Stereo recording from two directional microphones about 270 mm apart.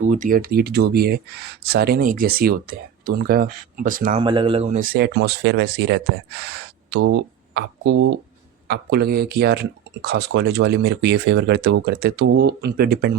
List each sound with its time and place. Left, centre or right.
0.0 s speech: right
4.2 s speech: centre; by 13.1 s right